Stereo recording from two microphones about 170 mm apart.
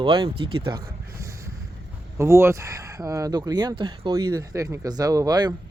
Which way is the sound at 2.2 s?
15° right (ahead or behind).